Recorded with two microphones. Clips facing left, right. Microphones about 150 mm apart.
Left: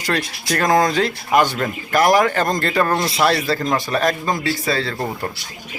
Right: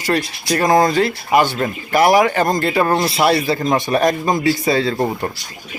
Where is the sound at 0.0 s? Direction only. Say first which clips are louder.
Right 3 dB; 5° right (ahead or behind).